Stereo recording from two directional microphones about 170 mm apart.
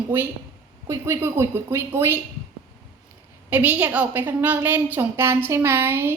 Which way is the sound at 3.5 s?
10° right (ahead or behind).